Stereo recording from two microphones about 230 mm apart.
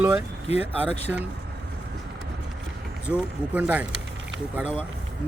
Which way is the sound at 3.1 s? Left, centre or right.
Centre.